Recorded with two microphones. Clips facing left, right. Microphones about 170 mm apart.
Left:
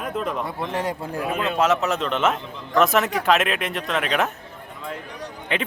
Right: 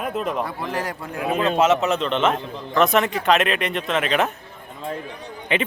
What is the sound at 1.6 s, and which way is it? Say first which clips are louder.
Speech: right 1 dB; centre (ahead or behind).